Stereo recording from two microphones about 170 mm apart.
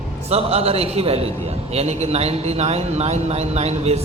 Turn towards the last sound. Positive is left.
turn(degrees=-40)  # may be behind; listen again after turning